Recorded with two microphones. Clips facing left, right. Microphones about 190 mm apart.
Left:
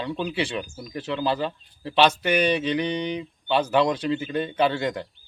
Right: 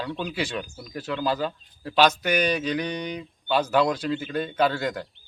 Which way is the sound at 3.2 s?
Centre (ahead or behind).